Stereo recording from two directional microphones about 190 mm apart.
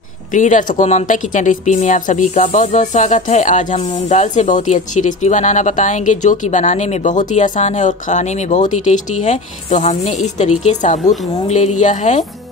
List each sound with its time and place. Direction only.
0.3 s a woman's voice: 40° left (ahead or behind)